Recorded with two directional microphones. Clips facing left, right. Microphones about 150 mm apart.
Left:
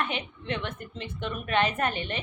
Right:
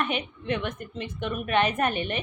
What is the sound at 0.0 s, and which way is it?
A woman's voice, 15° right (ahead or behind).